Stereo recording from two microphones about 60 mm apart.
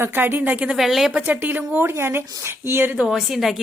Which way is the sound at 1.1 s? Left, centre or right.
Right.